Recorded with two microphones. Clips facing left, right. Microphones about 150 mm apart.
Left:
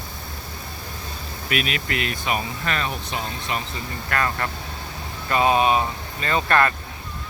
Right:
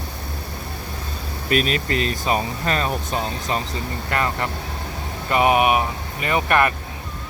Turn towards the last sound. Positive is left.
turn(degrees=-15)  # may be behind; listen again after turning